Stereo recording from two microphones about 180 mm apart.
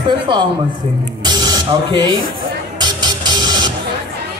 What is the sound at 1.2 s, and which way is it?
Speech, 25° right (ahead or behind).